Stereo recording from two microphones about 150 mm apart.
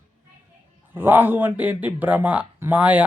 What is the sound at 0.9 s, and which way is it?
Speech, 15° right (ahead or behind).